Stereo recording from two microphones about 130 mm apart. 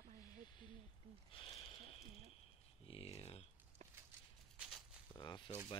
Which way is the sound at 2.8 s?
50° left (ahead or behind).